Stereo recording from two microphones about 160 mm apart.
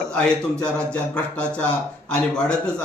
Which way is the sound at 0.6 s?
5° left (ahead or behind).